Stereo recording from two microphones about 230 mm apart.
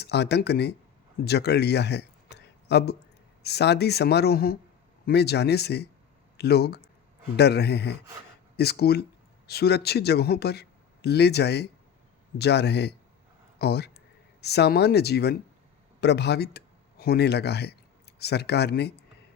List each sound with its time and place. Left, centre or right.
0.0 s speech: left